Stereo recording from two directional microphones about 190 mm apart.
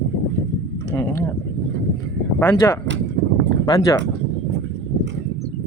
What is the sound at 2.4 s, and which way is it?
A man's voice, 15° left (ahead or behind).